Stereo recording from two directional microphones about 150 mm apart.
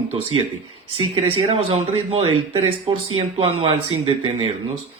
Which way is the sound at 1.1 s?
40° right (ahead or behind).